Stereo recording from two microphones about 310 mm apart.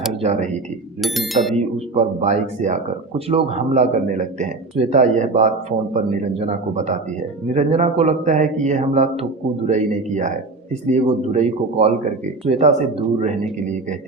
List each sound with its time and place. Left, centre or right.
0.2 s speech: right
1.0 s speech: centre
2.2 s a man's voice: right